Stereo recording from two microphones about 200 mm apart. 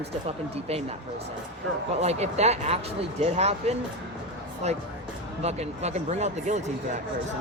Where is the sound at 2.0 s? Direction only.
35° right (ahead or behind).